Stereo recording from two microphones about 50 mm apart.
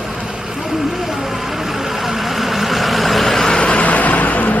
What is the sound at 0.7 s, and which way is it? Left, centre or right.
Vehicle, centre.